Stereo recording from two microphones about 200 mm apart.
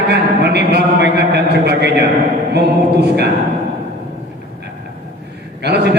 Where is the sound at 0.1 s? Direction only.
55° right (ahead or behind).